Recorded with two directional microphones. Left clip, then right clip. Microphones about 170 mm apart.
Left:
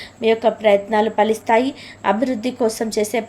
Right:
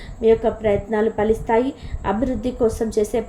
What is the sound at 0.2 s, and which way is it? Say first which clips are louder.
A woman's voice: even; 20° left (ahead or behind).